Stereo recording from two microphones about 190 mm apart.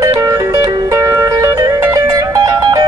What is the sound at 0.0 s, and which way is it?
Music, 15° right (ahead or behind).